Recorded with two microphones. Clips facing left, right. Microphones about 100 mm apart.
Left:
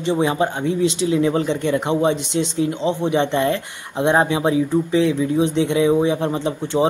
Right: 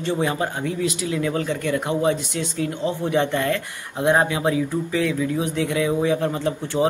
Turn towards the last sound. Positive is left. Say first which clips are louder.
# left 2 dB
turn(degrees=20)  # may be behind; listen again after turning